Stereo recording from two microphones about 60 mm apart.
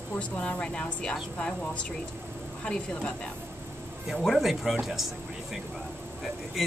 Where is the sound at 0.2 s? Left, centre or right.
Centre.